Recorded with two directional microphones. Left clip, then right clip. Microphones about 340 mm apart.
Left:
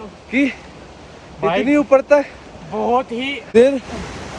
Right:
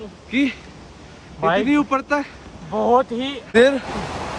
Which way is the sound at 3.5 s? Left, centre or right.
Centre.